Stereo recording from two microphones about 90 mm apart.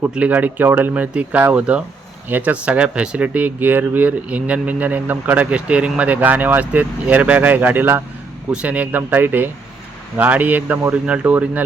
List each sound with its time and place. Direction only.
0.1 s speech: 15° right (ahead or behind)